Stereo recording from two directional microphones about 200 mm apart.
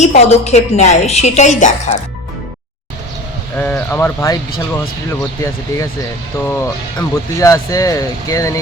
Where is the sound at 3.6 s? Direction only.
10° left (ahead or behind).